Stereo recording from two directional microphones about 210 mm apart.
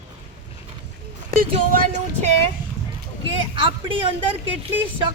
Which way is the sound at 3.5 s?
25° right (ahead or behind).